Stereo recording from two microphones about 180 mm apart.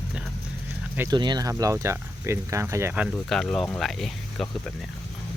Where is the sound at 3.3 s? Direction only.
Centre (ahead or behind).